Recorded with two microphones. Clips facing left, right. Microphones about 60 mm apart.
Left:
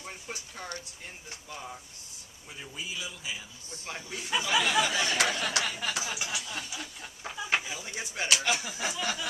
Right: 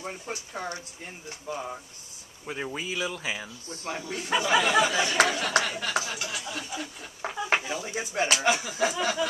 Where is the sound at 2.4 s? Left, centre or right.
Right.